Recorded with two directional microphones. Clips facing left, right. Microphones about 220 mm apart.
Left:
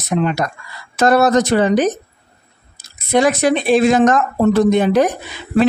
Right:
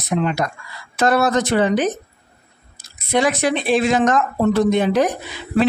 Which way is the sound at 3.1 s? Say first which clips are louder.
Left 4 dB; 45° left (ahead or behind).